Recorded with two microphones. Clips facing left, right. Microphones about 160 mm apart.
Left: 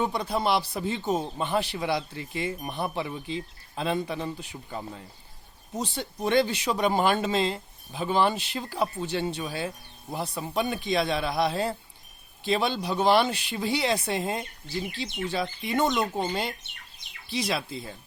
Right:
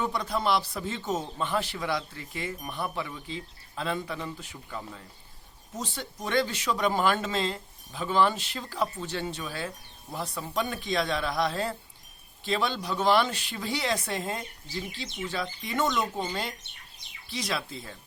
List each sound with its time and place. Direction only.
0.3 s speech: 20° left (ahead or behind)
14.8 s speech: 65° left (ahead or behind)
15.6 s speech: 20° left (ahead or behind)